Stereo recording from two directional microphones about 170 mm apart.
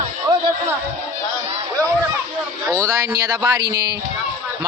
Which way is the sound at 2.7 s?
20° right (ahead or behind).